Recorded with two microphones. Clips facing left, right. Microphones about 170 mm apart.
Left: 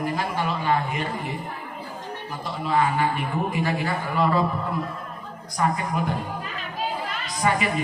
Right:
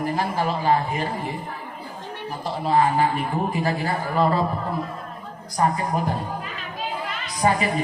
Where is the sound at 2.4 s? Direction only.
35° right (ahead or behind).